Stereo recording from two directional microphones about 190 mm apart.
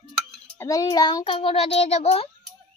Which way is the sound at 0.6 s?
20° left (ahead or behind).